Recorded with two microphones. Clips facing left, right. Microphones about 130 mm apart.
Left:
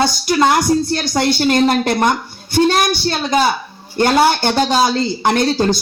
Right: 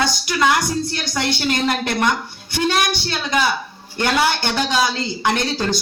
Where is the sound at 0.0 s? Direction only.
35° left (ahead or behind).